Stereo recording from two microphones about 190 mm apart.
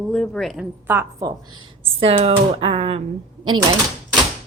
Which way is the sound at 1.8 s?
30° right (ahead or behind).